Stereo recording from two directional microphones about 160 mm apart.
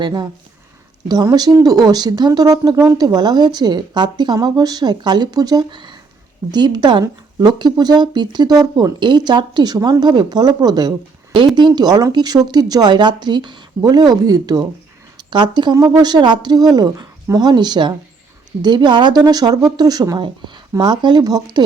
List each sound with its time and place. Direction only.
0.0 s speech: 25° right (ahead or behind)